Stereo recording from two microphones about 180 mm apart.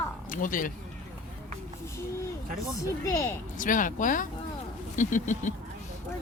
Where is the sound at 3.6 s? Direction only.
45° left (ahead or behind).